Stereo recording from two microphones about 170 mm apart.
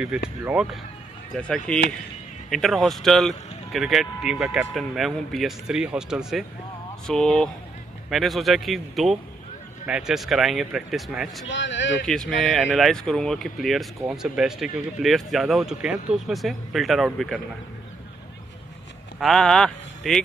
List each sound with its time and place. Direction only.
0.5 s speech: 5° right (ahead or behind)
11.4 s speech: 90° left
12.1 s speech: 5° left (ahead or behind)
19.1 s speech: centre (ahead or behind)